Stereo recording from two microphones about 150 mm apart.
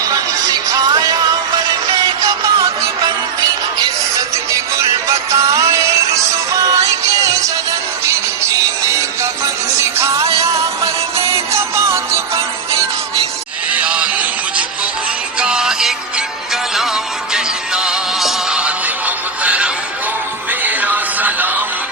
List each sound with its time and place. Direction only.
0.0 s music: 25° right (ahead or behind)
4.8 s music: 20° right (ahead or behind)
13.7 s music: 10° right (ahead or behind)
17.3 s music: 5° right (ahead or behind)